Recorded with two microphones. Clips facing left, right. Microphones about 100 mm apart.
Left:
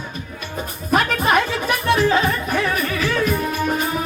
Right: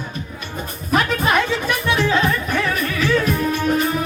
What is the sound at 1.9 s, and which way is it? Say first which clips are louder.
Music: left 2 dB; 45° left (ahead or behind).